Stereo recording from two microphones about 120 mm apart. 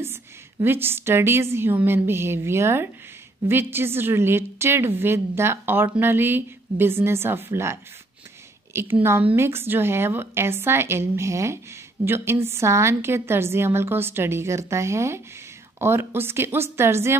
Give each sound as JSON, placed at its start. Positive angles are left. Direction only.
{"t": 0.0, "sound": "a woman's voice", "side_deg": -20}
{"t": 8.9, "sound": "a woman's voice", "side_deg": -20}